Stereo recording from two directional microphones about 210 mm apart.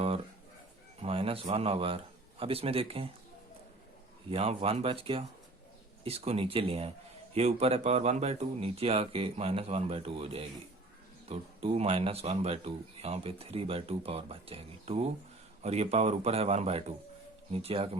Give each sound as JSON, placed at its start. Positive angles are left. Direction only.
{"t": 0.9, "sound": "speech", "side_deg": -30}
{"t": 4.3, "sound": "a man's voice", "side_deg": -30}